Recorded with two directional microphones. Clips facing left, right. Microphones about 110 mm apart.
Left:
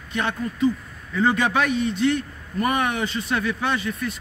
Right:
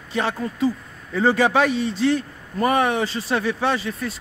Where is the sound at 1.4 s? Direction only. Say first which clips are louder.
Right 3 dB; 30° right (ahead or behind).